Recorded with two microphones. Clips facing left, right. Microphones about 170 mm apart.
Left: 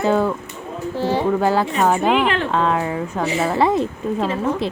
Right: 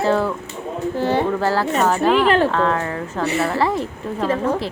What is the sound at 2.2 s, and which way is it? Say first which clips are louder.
Speech: right 5 dB; 40° right (ahead or behind).